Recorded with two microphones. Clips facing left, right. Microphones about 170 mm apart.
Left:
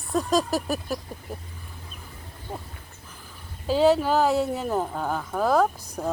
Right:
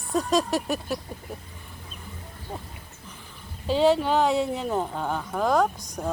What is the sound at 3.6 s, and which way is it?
Speech, centre (ahead or behind).